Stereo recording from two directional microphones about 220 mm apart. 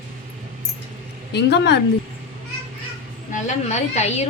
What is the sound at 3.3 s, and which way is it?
Speech, 30° left (ahead or behind).